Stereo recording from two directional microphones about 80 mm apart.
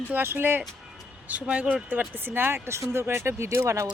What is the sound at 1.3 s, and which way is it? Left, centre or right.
Speech, centre.